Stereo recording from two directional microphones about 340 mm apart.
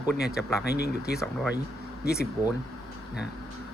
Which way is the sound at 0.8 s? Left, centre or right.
Left.